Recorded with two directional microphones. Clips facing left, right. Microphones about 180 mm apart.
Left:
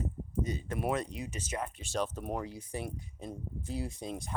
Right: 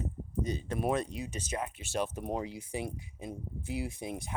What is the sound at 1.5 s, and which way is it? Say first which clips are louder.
Speech: right 1 dB; 10° right (ahead or behind).